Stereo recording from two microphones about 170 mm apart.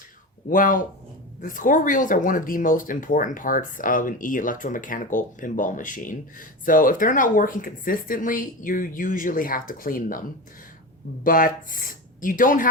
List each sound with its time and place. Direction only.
0.4 s speech: 55° left (ahead or behind)